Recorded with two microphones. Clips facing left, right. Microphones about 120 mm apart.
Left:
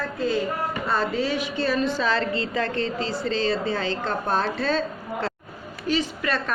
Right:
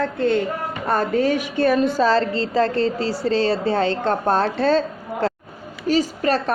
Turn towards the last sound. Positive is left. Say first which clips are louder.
# right 6 dB
turn(degrees=-40)  # may be behind; listen again after turning